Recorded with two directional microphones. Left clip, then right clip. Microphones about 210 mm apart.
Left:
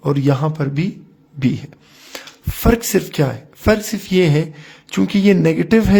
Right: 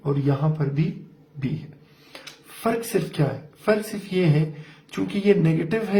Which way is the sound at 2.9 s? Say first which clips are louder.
Left 7 dB; 55° left (ahead or behind).